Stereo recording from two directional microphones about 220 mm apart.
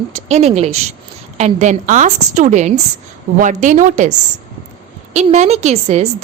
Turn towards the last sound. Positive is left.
turn(degrees=-30)  # may be behind; listen again after turning